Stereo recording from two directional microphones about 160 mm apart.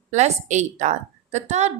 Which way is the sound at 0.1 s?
45° right (ahead or behind).